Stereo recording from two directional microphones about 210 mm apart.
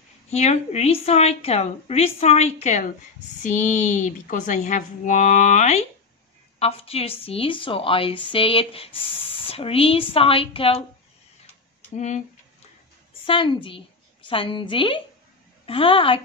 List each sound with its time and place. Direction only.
0.3 s a woman's voice: 30° left (ahead or behind)
13.2 s a woman's voice: 25° left (ahead or behind)